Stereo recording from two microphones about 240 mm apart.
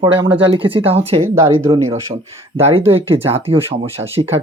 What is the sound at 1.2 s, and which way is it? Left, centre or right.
Speech, right.